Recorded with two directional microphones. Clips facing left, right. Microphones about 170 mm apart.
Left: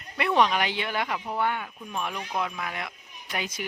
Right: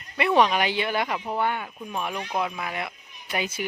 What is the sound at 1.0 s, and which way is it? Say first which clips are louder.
Speech: right 2 dB; 25° right (ahead or behind).